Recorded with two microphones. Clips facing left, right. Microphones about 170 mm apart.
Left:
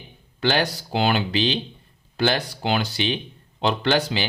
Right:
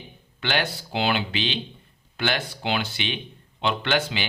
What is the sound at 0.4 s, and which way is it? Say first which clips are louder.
Speech: left 5 dB; 35° left (ahead or behind).